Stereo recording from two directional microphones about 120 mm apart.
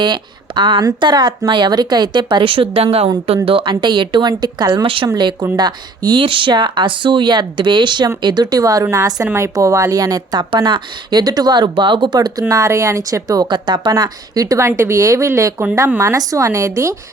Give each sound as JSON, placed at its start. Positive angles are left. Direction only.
{"t": 0.0, "sound": "speech", "side_deg": -40}